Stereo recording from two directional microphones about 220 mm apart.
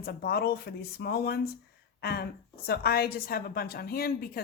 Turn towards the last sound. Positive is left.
turn(degrees=45)  # may be behind; listen again after turning